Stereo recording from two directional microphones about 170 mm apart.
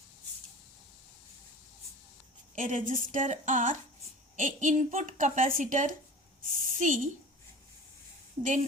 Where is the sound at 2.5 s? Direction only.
50° right (ahead or behind).